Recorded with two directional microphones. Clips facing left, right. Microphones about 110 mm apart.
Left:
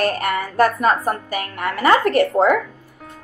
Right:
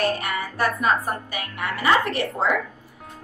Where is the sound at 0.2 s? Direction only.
50° left (ahead or behind).